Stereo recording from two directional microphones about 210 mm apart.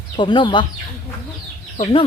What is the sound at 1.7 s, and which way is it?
Speech, 30° left (ahead or behind).